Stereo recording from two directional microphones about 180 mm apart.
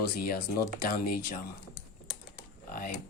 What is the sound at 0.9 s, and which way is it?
Speech, 50° left (ahead or behind).